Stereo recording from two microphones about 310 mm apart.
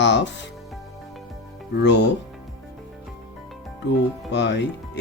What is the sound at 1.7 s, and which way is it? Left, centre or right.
Speech, left.